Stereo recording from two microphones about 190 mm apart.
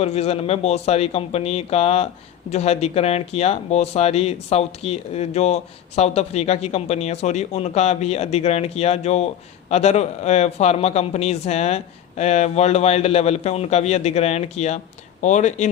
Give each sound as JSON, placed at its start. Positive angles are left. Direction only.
{"t": 0.0, "sound": "speech", "side_deg": 35}